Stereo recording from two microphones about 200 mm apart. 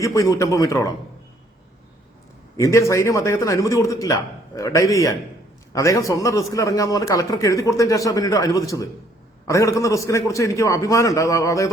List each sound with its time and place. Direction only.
0.0 s a man's voice: 15° left (ahead or behind)
2.6 s a man's voice: 15° left (ahead or behind)